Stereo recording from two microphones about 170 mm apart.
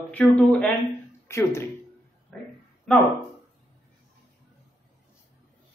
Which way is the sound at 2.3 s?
5° left (ahead or behind).